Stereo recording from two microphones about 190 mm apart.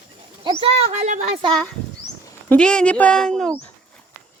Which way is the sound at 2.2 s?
5° left (ahead or behind).